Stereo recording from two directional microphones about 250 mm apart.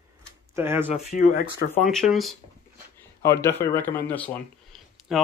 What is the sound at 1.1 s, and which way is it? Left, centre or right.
Speech, left.